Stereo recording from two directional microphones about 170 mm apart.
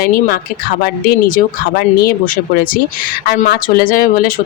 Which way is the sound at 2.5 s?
55° left (ahead or behind).